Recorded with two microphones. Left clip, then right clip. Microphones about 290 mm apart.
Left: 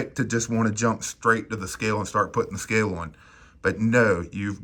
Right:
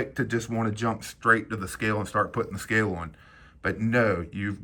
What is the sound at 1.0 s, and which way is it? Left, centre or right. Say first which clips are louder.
Speech: right 4 dB; centre.